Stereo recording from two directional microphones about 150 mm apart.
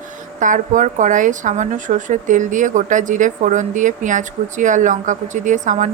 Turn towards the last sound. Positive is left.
turn(degrees=-55)  # may be behind; listen again after turning